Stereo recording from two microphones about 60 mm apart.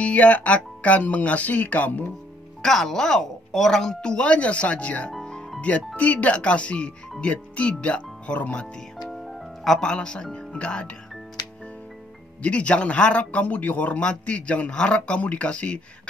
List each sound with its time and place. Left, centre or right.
0.0 s speech: left
2.6 s speech: centre; by 5.1 s left
5.1 s music: centre
5.6 s speech: left
9.1 s music: centre
9.8 s speech: centre
12.4 s speech: centre